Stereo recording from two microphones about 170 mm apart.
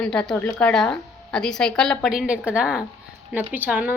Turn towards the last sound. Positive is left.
turn(degrees=-10)  # may be behind; listen again after turning